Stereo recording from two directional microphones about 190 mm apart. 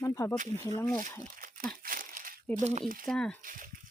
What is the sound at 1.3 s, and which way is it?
Tearing, 45° right (ahead or behind).